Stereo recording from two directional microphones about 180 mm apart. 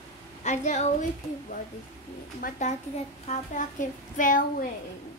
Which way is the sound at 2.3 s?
45° left (ahead or behind).